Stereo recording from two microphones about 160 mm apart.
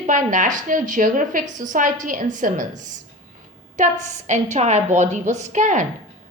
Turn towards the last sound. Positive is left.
turn(degrees=-50)  # may be behind; listen again after turning